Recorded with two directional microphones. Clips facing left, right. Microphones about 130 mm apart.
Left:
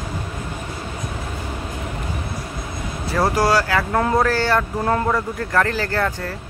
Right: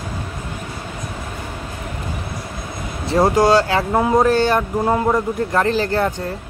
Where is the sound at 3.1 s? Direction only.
20° right (ahead or behind).